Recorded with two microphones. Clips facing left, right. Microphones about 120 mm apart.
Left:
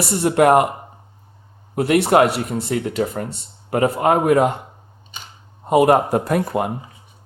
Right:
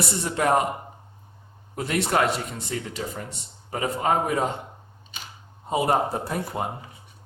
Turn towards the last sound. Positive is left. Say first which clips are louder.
# left 9 dB
turn(degrees=90)